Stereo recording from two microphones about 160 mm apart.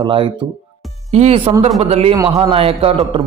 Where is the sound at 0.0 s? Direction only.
30° right (ahead or behind).